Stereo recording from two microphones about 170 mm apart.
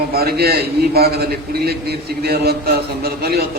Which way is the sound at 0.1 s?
65° right (ahead or behind).